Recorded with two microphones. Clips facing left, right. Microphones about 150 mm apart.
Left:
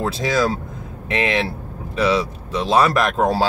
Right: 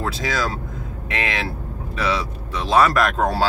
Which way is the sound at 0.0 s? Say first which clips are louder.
Left 5 dB; 25° left (ahead or behind).